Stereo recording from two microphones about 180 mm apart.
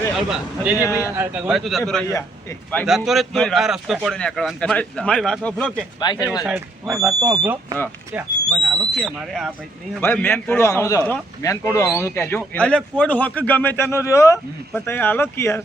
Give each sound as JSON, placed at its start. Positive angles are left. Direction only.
{"t": 0.3, "sound": "speech", "side_deg": -10}
{"t": 6.0, "sound": "speech", "side_deg": 20}
{"t": 6.4, "sound": "speech", "side_deg": 0}
{"t": 8.6, "sound": "speech", "side_deg": 0}
{"t": 10.0, "sound": "speech", "side_deg": 10}